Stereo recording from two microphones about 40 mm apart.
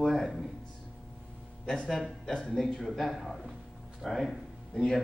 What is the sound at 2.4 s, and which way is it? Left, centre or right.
Speech, centre.